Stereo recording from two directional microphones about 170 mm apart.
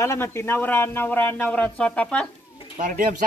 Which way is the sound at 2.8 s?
50° right (ahead or behind).